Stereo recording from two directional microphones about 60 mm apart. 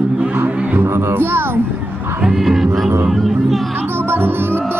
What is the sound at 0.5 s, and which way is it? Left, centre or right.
Speech, right.